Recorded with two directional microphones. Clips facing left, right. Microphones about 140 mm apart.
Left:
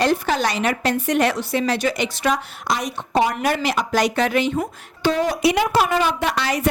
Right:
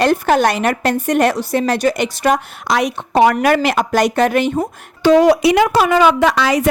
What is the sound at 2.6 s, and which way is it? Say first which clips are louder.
A woman's voice: right 7 dB; 75° right (ahead or behind).